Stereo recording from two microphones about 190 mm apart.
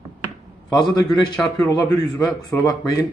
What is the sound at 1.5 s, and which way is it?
A man's voice, 15° left (ahead or behind).